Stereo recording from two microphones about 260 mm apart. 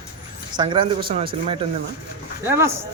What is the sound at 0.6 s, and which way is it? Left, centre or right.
Speech, centre.